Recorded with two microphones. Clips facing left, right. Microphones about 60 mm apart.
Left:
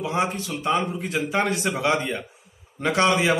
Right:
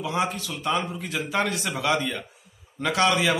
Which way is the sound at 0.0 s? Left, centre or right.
Left.